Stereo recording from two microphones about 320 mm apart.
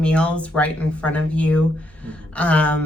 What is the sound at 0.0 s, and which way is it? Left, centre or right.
Speech, centre.